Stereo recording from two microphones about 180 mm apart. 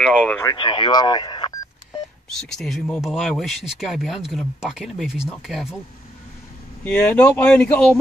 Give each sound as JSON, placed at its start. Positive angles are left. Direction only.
{"t": 0.0, "sound": "speech", "side_deg": 5}
{"t": 0.4, "sound": "speech", "side_deg": 20}
{"t": 2.2, "sound": "speech", "side_deg": 0}
{"t": 6.8, "sound": "speech", "side_deg": 10}